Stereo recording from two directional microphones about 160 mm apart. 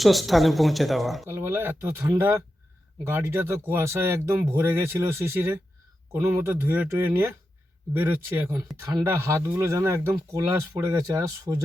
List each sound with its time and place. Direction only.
0.0 s a woman's voice: centre (ahead or behind)
1.3 s speech: 15° right (ahead or behind)